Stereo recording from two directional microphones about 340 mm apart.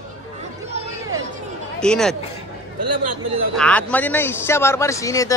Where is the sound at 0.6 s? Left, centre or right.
Centre.